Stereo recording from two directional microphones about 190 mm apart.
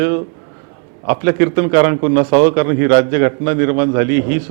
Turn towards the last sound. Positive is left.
turn(degrees=-15)  # may be behind; listen again after turning